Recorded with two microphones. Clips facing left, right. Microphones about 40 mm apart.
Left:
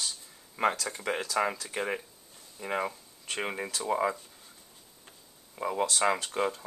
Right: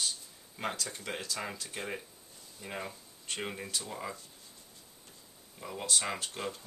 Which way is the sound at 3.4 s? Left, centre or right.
Left.